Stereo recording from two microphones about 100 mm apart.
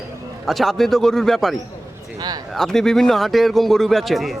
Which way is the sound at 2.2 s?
40° right (ahead or behind).